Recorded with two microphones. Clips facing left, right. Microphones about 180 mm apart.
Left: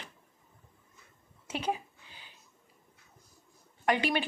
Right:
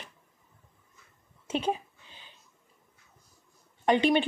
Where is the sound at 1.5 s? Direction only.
25° right (ahead or behind).